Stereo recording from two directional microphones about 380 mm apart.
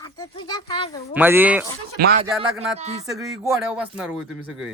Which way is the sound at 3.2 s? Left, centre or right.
Centre.